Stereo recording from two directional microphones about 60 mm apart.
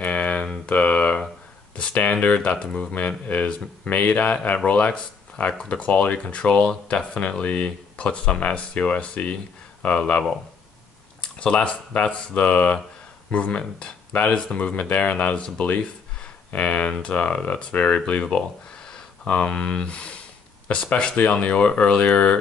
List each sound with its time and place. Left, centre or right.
0.0 s a sound: left
1.8 s speech: centre
2.9 s speech: left